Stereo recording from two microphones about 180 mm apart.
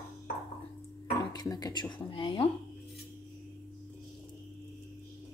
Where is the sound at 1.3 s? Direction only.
20° left (ahead or behind).